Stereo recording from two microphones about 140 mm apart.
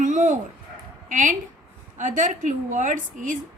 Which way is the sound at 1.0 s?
65° right (ahead or behind).